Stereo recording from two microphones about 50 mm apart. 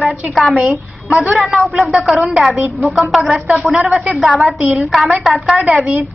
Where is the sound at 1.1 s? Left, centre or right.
Right.